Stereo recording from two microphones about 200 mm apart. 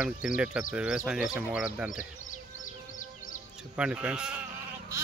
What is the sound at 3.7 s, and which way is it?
Speech, 5° right (ahead or behind).